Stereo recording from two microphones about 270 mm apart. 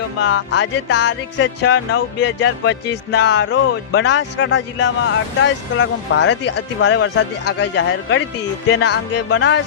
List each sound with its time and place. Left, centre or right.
0.2 s music: left